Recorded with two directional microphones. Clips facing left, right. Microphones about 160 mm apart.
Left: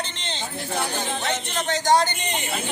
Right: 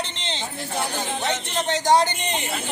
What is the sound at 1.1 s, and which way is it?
Speech, centre (ahead or behind).